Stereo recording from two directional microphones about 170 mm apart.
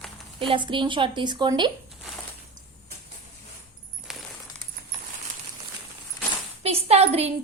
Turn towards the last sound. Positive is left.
turn(degrees=-40)  # may be behind; listen again after turning